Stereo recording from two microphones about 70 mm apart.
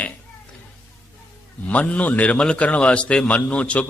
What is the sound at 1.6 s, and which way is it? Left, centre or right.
A man's voice, left.